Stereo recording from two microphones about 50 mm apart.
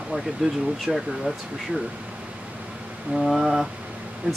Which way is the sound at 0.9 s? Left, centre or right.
Centre.